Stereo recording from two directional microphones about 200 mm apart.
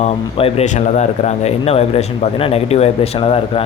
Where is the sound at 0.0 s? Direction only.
30° left (ahead or behind).